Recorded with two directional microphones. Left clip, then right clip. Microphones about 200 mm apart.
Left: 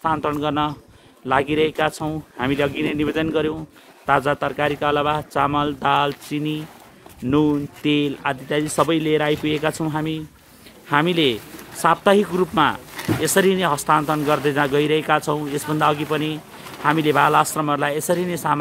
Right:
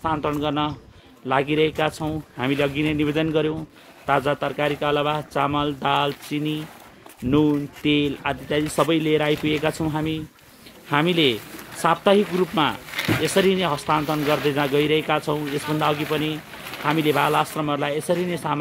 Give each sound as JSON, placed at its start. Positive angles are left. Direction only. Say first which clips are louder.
{"t": 0.0, "sound": "speech", "louder": "left 2 dB", "side_deg": 5}
{"t": 12.9, "sound": "a sound", "louder": "right 2 dB", "side_deg": -25}
{"t": 13.2, "sound": "speech", "louder": "left 3 dB", "side_deg": 5}